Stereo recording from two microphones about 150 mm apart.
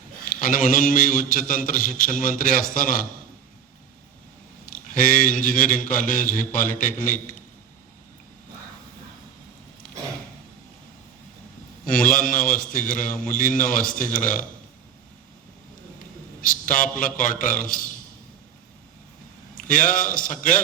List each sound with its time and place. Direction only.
0.3 s speech: 65° left (ahead or behind)
4.6 s speech: 65° left (ahead or behind)
11.9 s speech: 65° left (ahead or behind)
16.4 s a man's voice: 65° left (ahead or behind)
19.6 s speech: 65° left (ahead or behind)